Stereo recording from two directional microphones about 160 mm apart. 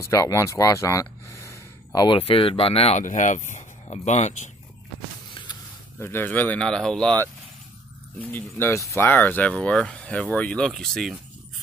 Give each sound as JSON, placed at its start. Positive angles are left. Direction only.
{"t": 0.1, "sound": "speech", "side_deg": 20}
{"t": 5.3, "sound": "a sound", "side_deg": 30}
{"t": 5.9, "sound": "speech", "side_deg": 15}